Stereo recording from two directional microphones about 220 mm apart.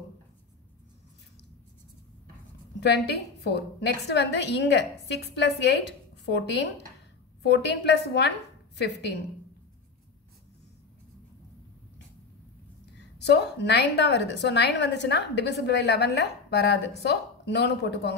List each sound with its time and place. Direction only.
2.8 s a woman's voice: 50° left (ahead or behind)
12.9 s a woman's voice: 50° left (ahead or behind)